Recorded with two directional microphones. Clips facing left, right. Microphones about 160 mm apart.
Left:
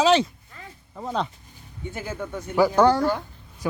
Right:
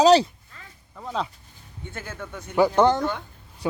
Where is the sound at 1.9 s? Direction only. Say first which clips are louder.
Left 5 dB; 10° left (ahead or behind).